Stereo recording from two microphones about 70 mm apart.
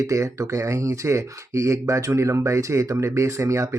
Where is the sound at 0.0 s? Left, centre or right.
Right.